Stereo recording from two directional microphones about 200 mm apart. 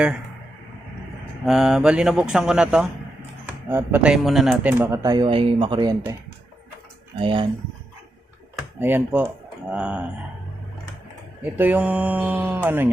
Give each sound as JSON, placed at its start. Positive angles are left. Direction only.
{"t": 1.5, "sound": "speech", "side_deg": 0}
{"t": 7.2, "sound": "speech", "side_deg": -25}
{"t": 8.5, "sound": "speech", "side_deg": -10}
{"t": 11.5, "sound": "speech", "side_deg": -10}